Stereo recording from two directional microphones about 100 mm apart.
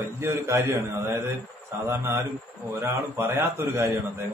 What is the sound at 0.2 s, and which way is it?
A man's voice, 30° right (ahead or behind).